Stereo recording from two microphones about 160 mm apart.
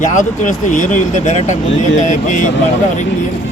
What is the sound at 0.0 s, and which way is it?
Speech, 50° left (ahead or behind).